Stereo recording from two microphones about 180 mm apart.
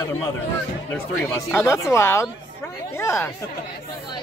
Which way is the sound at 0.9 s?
10° left (ahead or behind).